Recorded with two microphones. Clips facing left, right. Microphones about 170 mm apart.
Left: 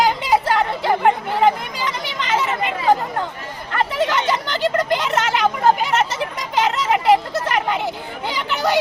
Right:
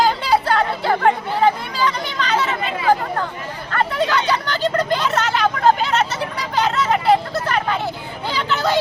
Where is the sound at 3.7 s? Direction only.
15° left (ahead or behind).